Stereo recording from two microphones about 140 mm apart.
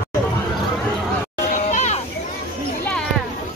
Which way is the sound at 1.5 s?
60° left (ahead or behind).